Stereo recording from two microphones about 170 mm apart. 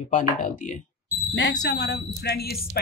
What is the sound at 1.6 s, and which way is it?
Speech, 85° left.